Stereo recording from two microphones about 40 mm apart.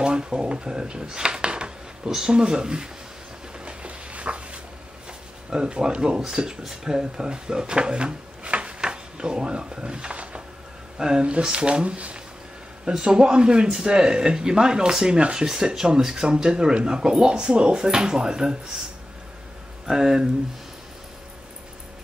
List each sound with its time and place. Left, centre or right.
0.0 s speech: right
3.5 s a sound: right
5.5 s speech: right
12.9 s speech: centre
19.9 s speech: centre